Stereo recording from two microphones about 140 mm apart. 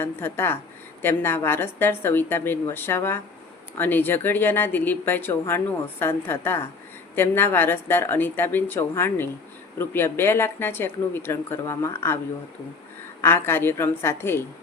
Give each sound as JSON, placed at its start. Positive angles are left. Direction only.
{"t": 0.0, "sound": "speech", "side_deg": 15}
{"t": 13.2, "sound": "speech", "side_deg": 15}